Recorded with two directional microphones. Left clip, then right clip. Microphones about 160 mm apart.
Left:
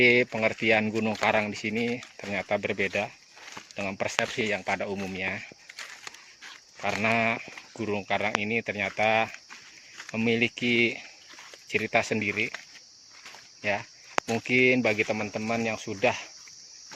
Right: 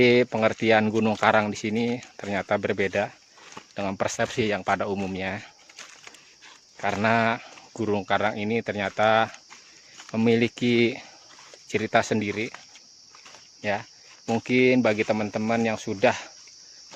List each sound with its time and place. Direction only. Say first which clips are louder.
0.0 s speech: right 2 dB; 45° right (ahead or behind)
6.8 s speech: right 3 dB; 40° right (ahead or behind)
13.6 s speech: right 1 dB; 35° right (ahead or behind)